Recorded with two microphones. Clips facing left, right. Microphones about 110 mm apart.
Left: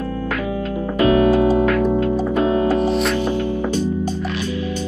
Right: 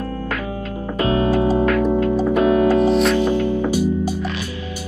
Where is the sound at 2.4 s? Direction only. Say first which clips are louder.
Right 3 dB; 30° left (ahead or behind).